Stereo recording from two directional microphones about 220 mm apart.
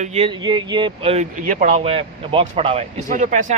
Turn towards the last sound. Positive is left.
turn(degrees=-35)  # may be behind; listen again after turning